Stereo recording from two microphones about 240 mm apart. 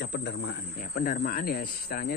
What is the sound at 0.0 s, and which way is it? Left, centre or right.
Speech, left.